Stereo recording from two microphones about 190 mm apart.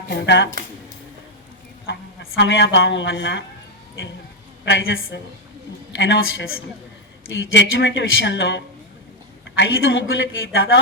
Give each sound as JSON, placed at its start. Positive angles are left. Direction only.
{"t": 0.1, "sound": "speech", "side_deg": 65}
{"t": 1.9, "sound": "speech", "side_deg": 65}
{"t": 4.6, "sound": "speech", "side_deg": 80}
{"t": 6.0, "sound": "a woman's voice", "side_deg": 90}
{"t": 7.5, "sound": "a woman's voice", "side_deg": 70}